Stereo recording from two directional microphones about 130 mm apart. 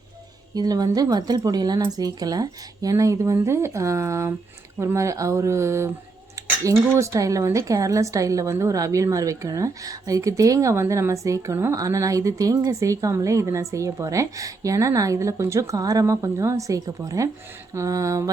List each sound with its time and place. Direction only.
0.5 s speech: 30° right (ahead or behind)